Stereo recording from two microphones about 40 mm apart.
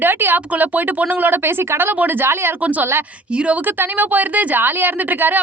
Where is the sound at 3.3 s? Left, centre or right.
Right.